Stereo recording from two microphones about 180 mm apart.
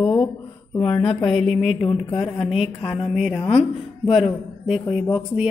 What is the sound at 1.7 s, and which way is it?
Speech, 30° left (ahead or behind).